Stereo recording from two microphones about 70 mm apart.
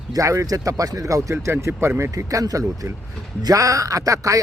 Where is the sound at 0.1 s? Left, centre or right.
Right.